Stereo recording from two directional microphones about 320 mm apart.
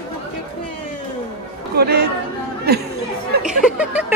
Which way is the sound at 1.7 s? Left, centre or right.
Right.